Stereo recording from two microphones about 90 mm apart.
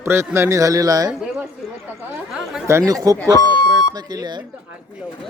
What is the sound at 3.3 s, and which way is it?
Speech, 50° left (ahead or behind).